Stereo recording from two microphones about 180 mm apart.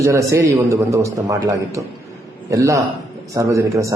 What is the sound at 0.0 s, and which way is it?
A man's voice, 15° right (ahead or behind).